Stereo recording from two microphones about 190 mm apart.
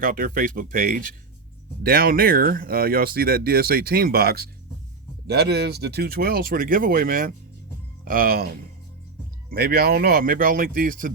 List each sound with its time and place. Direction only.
0.0 s speech: 45° right (ahead or behind)
9.5 s speech: 55° right (ahead or behind)